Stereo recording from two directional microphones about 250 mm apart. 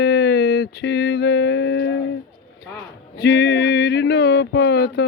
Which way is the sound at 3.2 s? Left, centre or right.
Left.